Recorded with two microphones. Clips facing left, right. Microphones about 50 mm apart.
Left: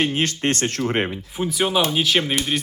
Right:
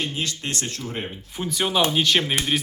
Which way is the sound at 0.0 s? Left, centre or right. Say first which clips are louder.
Left 7 dB; left.